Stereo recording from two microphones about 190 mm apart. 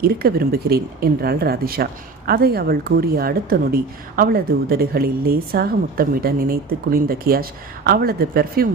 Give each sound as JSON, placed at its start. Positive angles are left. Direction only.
{"t": 0.0, "sound": "speech", "side_deg": -55}